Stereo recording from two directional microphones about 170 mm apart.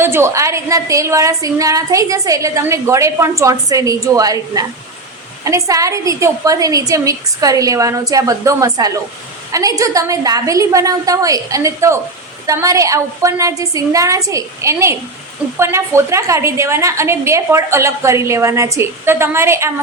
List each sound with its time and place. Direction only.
0.0 s a woman's voice: 15° right (ahead or behind)